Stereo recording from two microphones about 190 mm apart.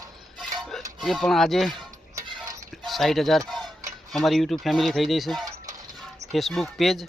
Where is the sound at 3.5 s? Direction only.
Centre (ahead or behind).